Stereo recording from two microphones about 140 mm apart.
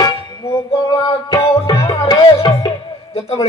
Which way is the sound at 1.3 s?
25° left (ahead or behind).